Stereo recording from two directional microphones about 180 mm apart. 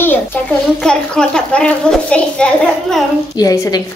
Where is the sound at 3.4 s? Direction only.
20° left (ahead or behind).